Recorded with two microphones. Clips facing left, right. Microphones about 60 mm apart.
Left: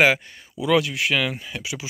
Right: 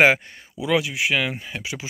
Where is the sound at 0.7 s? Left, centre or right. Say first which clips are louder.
Left 1 dB; centre.